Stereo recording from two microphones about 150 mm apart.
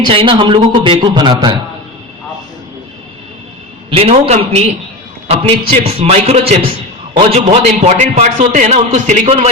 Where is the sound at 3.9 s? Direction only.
40° right (ahead or behind).